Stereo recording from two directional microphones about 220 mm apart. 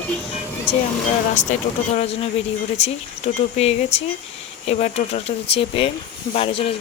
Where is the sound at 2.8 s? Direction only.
30° left (ahead or behind).